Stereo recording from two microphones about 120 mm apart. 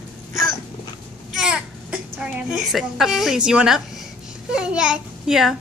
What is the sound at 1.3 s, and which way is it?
A child's voice, 5° right (ahead or behind).